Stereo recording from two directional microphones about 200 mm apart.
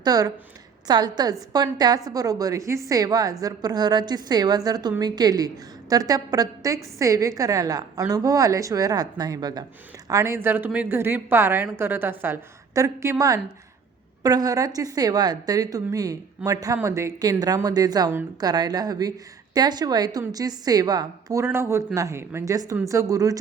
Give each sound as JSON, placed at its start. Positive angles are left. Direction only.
{"t": 0.0, "sound": "a woman's voice", "side_deg": -20}